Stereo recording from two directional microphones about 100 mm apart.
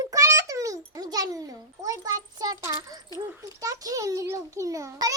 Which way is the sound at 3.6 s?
35° right (ahead or behind).